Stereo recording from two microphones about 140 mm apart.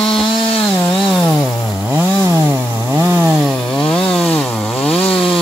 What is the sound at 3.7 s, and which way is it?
Chainsaw, 10° left (ahead or behind).